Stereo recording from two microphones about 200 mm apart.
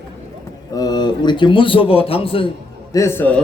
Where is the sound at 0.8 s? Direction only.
20° left (ahead or behind).